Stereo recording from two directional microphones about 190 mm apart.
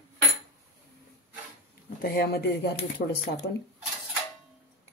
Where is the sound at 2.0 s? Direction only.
55° left (ahead or behind).